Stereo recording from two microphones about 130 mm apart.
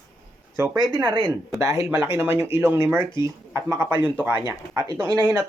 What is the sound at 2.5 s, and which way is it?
Speech, 15° right (ahead or behind).